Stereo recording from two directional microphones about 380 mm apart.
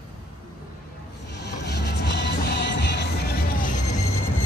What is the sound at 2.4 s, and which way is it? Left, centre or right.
Music, left.